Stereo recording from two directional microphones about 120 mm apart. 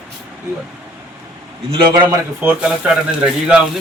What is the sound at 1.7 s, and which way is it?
Speech, 50° right (ahead or behind).